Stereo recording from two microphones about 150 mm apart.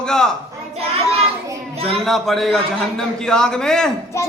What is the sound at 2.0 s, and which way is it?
A man's voice, centre (ahead or behind).